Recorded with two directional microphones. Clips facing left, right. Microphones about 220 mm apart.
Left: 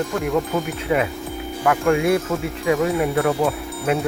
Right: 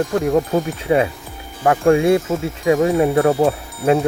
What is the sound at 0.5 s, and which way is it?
Insect, 30° right (ahead or behind).